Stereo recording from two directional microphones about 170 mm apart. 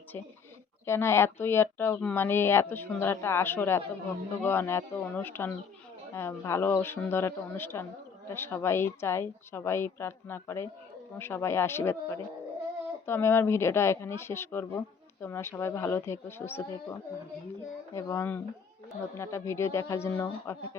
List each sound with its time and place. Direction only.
0.9 s a woman's voice: 15° left (ahead or behind)
17.9 s a woman's voice: 15° left (ahead or behind)